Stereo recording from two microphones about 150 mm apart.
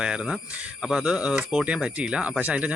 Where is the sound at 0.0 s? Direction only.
5° right (ahead or behind).